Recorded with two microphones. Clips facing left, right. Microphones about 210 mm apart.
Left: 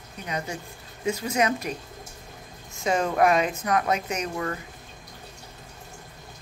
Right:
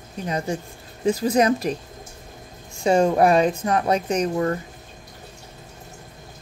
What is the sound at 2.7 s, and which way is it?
Speech, 30° right (ahead or behind).